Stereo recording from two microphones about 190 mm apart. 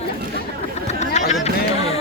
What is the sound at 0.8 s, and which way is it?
Speech, 35° left (ahead or behind).